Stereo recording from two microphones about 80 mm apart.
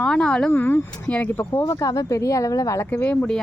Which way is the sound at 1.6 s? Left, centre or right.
Left.